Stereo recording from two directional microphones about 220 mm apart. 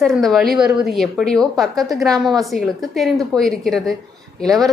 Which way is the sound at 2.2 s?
20° right (ahead or behind).